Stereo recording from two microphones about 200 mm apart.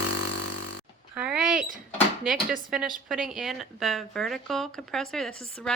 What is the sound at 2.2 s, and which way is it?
Speech, centre (ahead or behind).